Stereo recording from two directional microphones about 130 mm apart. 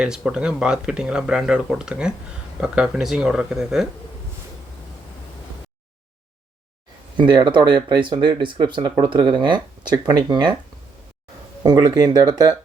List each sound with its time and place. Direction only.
0.3 s speech: 5° right (ahead or behind)
7.2 s speech: 35° right (ahead or behind)
11.6 s speech: 30° right (ahead or behind)